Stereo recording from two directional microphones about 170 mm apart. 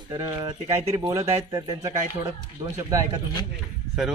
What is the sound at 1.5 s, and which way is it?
Speech, 20° right (ahead or behind).